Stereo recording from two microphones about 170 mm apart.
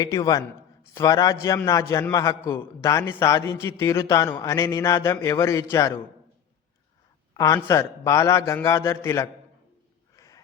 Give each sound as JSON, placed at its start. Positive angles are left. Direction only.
{"t": 0.0, "sound": "a man's voice", "side_deg": 20}
{"t": 7.3, "sound": "a man's voice", "side_deg": 20}
{"t": 10.2, "sound": "gasp", "side_deg": 20}